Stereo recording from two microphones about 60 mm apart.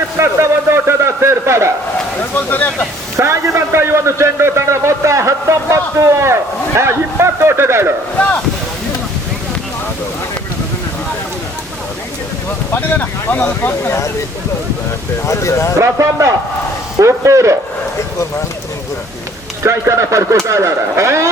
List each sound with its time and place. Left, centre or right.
0.2 s a man's voice: right
2.3 s speech: left
3.2 s a sound: right
12.7 s speech: left
15.3 s speech: left
15.8 s speech: right
19.6 s speech: right